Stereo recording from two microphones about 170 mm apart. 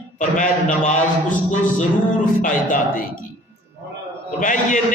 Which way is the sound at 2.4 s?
50° left (ahead or behind).